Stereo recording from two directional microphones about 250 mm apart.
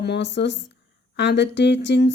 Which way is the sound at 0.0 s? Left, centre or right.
Left.